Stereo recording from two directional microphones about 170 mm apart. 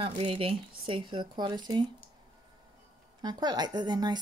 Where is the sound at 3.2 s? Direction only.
25° right (ahead or behind).